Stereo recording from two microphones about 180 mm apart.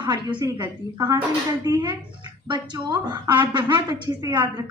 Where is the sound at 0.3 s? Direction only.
25° right (ahead or behind).